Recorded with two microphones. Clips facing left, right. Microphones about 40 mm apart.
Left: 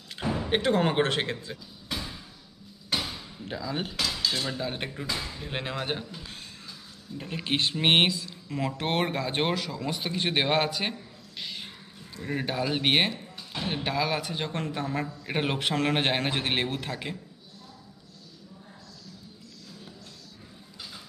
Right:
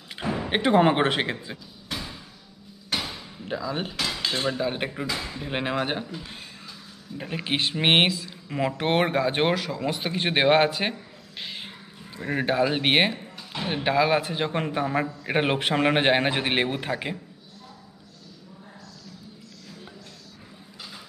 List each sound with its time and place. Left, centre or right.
0.1 s speech: centre
1.9 s a sound: centre
2.9 s door: centre
4.2 s cutlery: right
4.5 s speech: centre
7.2 s speech: centre